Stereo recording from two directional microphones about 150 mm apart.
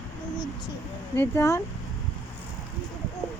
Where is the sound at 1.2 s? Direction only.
20° left (ahead or behind).